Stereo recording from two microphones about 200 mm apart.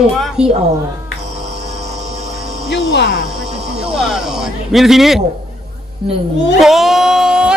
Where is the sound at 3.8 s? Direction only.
5° right (ahead or behind).